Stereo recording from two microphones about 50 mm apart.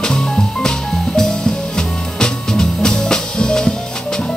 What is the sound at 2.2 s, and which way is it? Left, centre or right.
Music, centre.